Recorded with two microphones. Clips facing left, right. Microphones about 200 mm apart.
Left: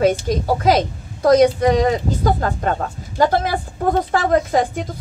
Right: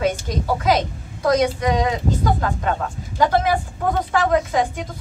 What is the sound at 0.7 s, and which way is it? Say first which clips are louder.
A woman's voice: left 3 dB; 35° left (ahead or behind).